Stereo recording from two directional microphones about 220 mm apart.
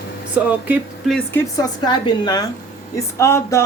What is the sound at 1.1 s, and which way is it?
A woman's voice, 10° left (ahead or behind).